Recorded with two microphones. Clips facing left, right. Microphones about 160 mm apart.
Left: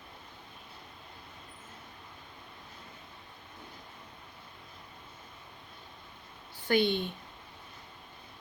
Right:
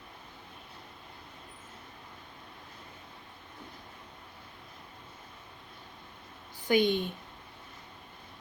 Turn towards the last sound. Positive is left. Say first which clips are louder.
# right 2 dB
turn(degrees=-45)  # may be behind; listen again after turning